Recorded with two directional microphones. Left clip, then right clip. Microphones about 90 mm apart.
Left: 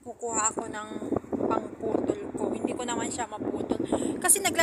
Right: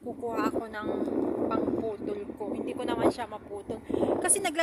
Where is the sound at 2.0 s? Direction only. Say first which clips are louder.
Left 4 dB; 35° right (ahead or behind).